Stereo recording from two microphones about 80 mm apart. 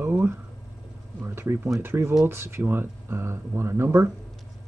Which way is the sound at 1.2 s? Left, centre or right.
Right.